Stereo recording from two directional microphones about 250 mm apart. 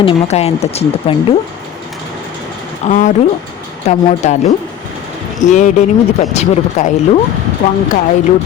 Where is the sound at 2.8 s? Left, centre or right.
Left.